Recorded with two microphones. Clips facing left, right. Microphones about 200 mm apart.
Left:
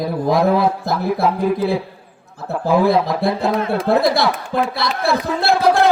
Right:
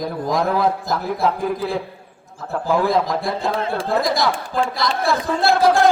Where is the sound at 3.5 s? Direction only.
30° right (ahead or behind).